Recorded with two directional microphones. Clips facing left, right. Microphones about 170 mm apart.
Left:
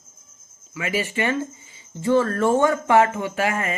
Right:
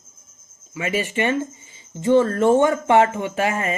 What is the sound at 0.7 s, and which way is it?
Speech, 25° right (ahead or behind).